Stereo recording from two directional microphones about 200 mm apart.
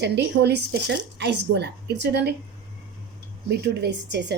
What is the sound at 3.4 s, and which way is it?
Speech, 55° right (ahead or behind).